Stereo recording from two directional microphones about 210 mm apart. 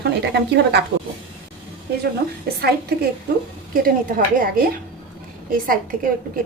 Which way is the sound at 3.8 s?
45° right (ahead or behind).